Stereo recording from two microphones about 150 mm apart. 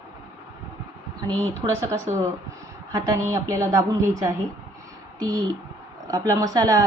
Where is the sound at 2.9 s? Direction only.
20° right (ahead or behind).